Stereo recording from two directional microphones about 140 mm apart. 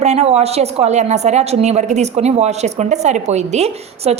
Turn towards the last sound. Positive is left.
turn(degrees=-50)  # may be behind; listen again after turning